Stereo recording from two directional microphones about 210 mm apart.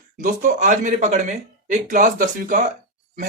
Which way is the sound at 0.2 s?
40° right (ahead or behind).